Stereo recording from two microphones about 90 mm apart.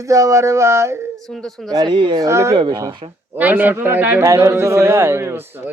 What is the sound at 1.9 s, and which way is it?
Speech, 65° right (ahead or behind).